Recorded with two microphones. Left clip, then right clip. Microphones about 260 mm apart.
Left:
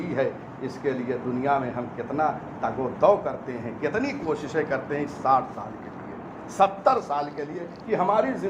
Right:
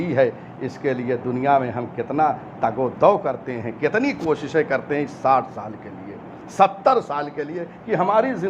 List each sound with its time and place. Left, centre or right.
0.0 s speech: right
6.6 s speech: right